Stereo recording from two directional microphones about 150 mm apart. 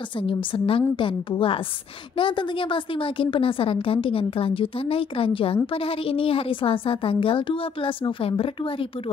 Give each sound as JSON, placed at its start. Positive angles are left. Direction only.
{"t": 0.3, "sound": "a woman's voice", "side_deg": 35}